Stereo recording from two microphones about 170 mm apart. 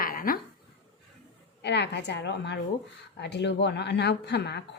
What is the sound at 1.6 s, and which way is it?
A woman's voice, 90° left.